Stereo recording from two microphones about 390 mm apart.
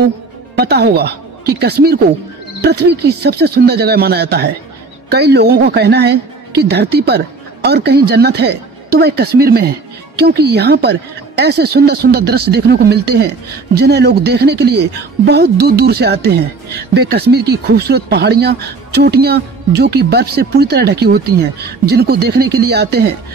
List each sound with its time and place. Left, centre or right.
0.6 s speech: right